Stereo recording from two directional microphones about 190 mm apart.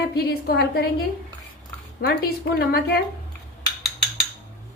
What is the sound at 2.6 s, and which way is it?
Speech, 55° left (ahead or behind).